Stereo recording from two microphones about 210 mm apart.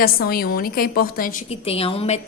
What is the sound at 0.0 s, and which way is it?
A woman's voice, 45° left (ahead or behind).